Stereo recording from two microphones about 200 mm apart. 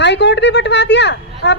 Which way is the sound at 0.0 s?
60° left (ahead or behind).